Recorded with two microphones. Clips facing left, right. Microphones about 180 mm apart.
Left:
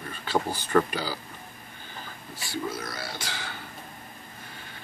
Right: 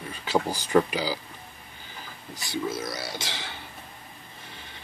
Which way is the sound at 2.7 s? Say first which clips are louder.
Right 3 dB; 20° right (ahead or behind).